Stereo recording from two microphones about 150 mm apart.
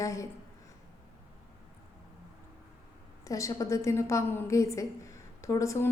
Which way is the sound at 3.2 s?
20° left (ahead or behind).